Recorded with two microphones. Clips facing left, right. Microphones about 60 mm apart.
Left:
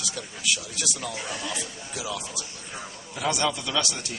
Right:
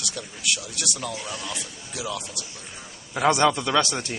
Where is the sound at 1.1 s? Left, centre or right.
Centre.